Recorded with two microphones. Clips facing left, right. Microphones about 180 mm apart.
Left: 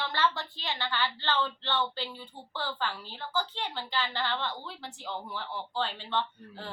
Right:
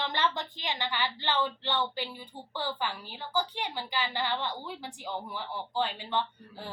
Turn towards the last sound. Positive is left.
turn(degrees=-15)  # may be behind; listen again after turning